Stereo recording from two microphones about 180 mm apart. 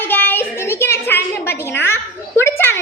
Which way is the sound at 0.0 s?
10° left (ahead or behind).